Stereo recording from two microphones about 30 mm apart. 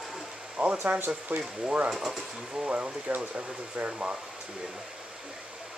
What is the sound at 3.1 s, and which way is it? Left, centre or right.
Speech, right.